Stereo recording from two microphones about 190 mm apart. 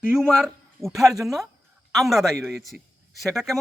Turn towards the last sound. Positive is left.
turn(degrees=0)  # may be behind; listen again after turning